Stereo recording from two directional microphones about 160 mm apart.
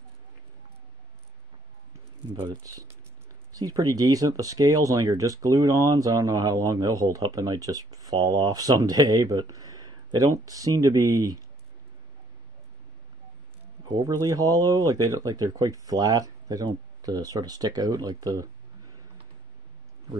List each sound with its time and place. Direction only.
2.4 s speech: 25° right (ahead or behind)
13.8 s speech: 25° right (ahead or behind)